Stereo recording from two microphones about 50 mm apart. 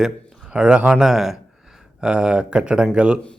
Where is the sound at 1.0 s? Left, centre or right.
Centre.